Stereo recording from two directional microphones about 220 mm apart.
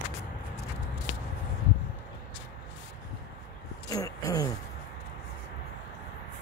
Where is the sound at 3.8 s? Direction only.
15° left (ahead or behind).